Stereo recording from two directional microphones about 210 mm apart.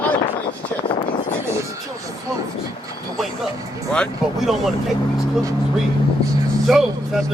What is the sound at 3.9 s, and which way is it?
Speech, centre (ahead or behind).